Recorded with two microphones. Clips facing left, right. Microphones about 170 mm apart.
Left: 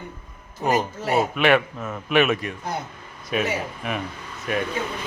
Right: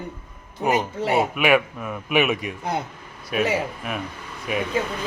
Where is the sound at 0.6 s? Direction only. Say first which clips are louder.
Right 1 dB; centre (ahead or behind).